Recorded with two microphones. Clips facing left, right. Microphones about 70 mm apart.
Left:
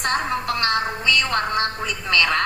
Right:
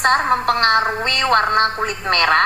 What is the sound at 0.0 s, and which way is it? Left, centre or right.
A woman's voice, right.